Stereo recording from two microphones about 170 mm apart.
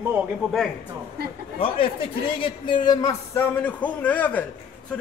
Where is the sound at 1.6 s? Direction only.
30° left (ahead or behind); by 4.5 s 10° left (ahead or behind).